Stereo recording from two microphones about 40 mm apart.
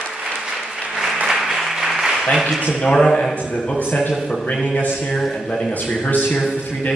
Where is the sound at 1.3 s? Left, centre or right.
Centre.